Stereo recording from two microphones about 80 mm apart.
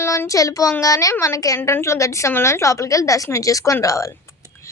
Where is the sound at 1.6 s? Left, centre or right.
Left.